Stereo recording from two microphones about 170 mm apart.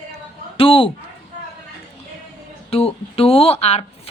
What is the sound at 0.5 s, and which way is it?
Speech, 30° left (ahead or behind).